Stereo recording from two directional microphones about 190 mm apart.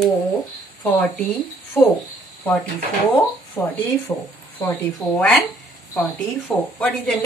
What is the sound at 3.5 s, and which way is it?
A woman's voice, 10° left (ahead or behind).